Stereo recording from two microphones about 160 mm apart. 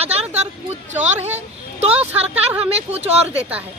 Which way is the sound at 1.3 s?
40° right (ahead or behind).